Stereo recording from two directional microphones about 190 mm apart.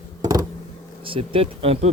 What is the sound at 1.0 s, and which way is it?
Speech, 30° right (ahead or behind).